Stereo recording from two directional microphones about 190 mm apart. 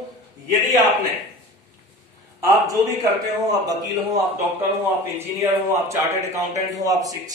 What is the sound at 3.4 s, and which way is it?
A man's voice, 20° right (ahead or behind).